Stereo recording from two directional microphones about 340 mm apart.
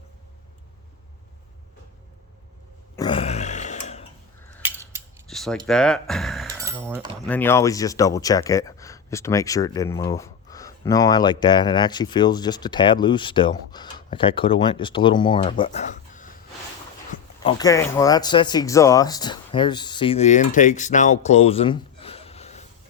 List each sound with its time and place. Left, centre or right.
2.9 s a sound: centre
4.5 s scissors: centre
4.9 s music: centre
7.3 s speech: centre
17.4 s speech: centre